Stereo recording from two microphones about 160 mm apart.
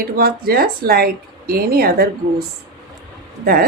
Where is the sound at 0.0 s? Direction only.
70° right (ahead or behind).